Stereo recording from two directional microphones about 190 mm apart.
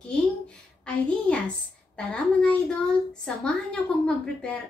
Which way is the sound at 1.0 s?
5° left (ahead or behind).